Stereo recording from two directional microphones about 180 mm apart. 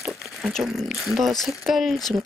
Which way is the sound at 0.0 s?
Centre (ahead or behind).